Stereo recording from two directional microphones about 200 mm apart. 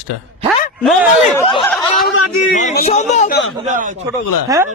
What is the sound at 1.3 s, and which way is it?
Speech, 25° left (ahead or behind).